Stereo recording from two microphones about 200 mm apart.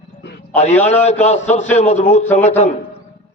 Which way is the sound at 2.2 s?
10° left (ahead or behind).